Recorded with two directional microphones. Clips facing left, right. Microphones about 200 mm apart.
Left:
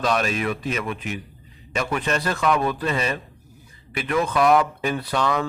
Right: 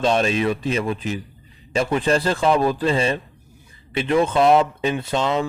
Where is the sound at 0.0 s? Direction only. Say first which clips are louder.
Right 4 dB; 25° right (ahead or behind).